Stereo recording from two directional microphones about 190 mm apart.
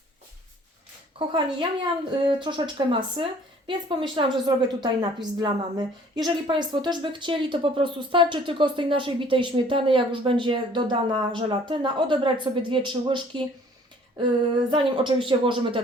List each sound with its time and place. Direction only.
1.3 s a woman's voice: 25° right (ahead or behind)
14.7 s a woman's voice: 25° right (ahead or behind)